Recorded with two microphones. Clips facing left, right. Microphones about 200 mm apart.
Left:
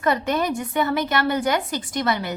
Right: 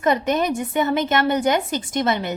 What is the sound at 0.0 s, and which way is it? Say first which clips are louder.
A woman's voice: right 2 dB; 20° right (ahead or behind).